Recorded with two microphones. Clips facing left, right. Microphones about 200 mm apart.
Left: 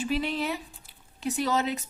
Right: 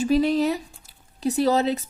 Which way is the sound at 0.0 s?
40° right (ahead or behind).